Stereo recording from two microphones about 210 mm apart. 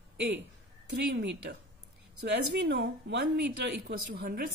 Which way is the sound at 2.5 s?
55° right (ahead or behind).